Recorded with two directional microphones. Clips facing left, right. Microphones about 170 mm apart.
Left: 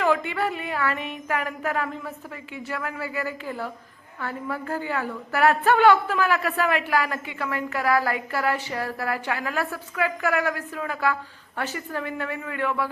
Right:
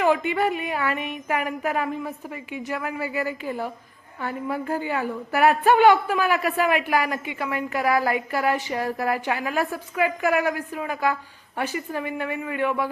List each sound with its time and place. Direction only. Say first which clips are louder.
0.0 s a woman's voice: right 2 dB; 20° right (ahead or behind)